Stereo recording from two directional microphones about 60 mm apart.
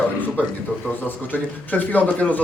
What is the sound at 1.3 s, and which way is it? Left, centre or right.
A man's voice, left.